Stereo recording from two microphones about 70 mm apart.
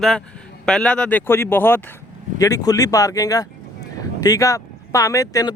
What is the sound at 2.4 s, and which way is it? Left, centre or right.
Speech, left.